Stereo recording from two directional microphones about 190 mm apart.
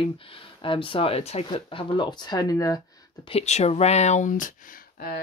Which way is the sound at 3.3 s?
35° left (ahead or behind).